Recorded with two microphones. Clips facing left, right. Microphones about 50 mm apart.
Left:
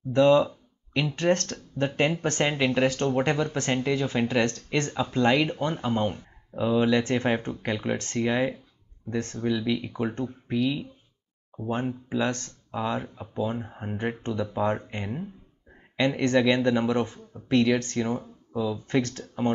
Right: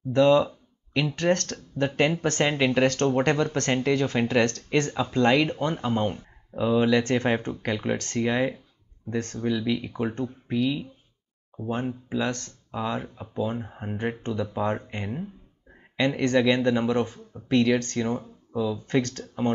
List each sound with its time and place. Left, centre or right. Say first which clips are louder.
0.1 s speech: even; centre
7.0 s speech: right 1 dB; centre